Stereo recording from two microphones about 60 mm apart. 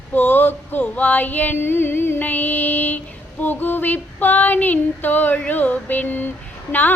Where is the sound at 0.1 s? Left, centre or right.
Left.